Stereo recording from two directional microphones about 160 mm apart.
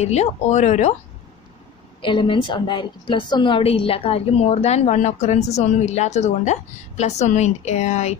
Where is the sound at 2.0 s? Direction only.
30° left (ahead or behind).